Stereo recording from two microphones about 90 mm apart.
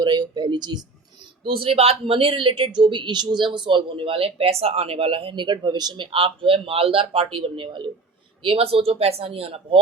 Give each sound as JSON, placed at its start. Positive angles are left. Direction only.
{"t": 0.0, "sound": "speech", "side_deg": -50}
{"t": 1.5, "sound": "a man's voice", "side_deg": -90}
{"t": 8.4, "sound": "speech", "side_deg": -85}